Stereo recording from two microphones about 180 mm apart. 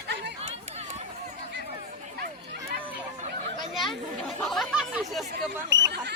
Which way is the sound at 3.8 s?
Centre (ahead or behind).